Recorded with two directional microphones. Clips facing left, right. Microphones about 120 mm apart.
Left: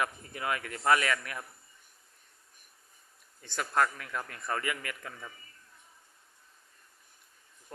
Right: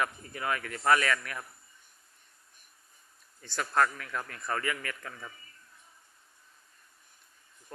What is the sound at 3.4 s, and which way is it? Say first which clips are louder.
Speech: right 1 dB; 15° left (ahead or behind).